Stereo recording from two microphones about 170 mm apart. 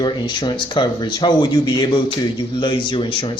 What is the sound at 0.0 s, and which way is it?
Speech, 25° left (ahead or behind).